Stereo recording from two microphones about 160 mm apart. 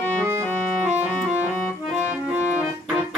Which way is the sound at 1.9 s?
10° right (ahead or behind).